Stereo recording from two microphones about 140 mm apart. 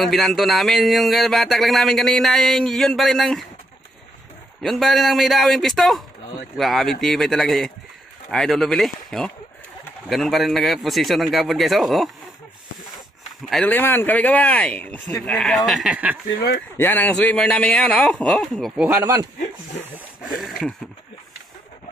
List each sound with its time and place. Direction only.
0.0 s speech: centre (ahead or behind)
4.6 s speech: 5° left (ahead or behind)
13.7 s a man's voice: 15° left (ahead or behind); by 16.2 s 10° right (ahead or behind)
16.7 s a man's voice: 15° left (ahead or behind)
18.9 s speech: 25° right (ahead or behind)
20.2 s speech: centre (ahead or behind)